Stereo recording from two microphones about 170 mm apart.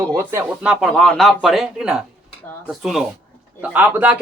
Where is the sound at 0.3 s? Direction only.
10° right (ahead or behind).